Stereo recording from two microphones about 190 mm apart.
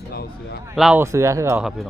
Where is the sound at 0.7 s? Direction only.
5° right (ahead or behind).